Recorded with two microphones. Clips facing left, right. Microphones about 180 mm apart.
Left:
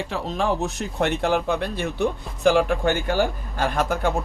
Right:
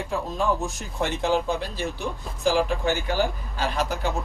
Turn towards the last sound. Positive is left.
turn(degrees=55)  # may be behind; listen again after turning